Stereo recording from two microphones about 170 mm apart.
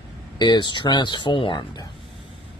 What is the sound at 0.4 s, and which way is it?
Speech, 25° left (ahead or behind).